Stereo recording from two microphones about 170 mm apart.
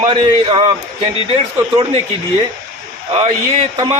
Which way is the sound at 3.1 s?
30° right (ahead or behind).